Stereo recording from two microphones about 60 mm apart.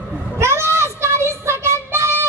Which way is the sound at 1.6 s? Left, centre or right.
Right.